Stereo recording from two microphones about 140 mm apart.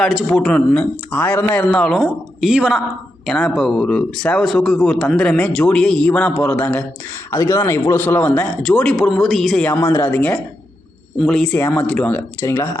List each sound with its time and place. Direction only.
0.0 s a man's voice: centre (ahead or behind)
7.3 s a man's voice: 20° left (ahead or behind); by 9.6 s centre (ahead or behind)
9.6 s a man's voice: 15° left (ahead or behind)